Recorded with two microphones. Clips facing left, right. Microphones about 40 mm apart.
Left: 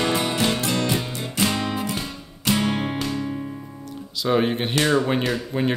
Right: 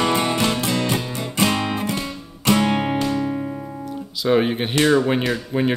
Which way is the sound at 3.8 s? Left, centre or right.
Centre.